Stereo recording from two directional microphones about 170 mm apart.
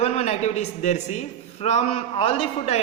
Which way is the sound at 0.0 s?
40° left (ahead or behind).